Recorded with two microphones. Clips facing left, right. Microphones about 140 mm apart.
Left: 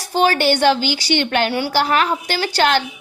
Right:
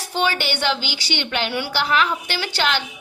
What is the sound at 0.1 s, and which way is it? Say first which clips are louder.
A woman's voice: left 7 dB; 40° left (ahead or behind).